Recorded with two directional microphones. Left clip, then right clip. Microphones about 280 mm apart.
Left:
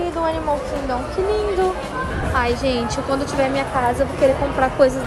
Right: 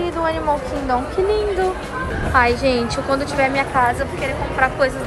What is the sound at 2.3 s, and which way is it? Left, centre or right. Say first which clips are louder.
Speech: right 4 dB; centre.